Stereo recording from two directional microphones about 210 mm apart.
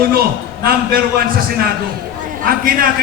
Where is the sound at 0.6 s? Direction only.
45° right (ahead or behind).